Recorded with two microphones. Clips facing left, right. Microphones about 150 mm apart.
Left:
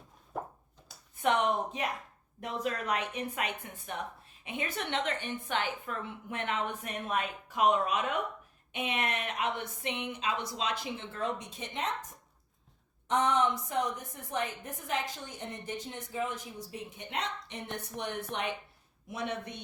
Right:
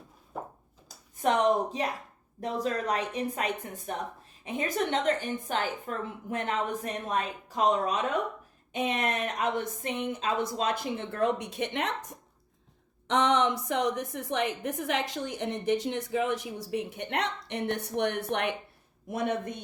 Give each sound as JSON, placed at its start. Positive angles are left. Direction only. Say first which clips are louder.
{"t": 0.3, "sound": "a sound", "louder": "even", "side_deg": 0}
{"t": 0.9, "sound": "a woman's voice", "louder": "right 2 dB", "side_deg": -40}
{"t": 19.0, "sound": "a woman's voice", "louder": "right 6 dB", "side_deg": -50}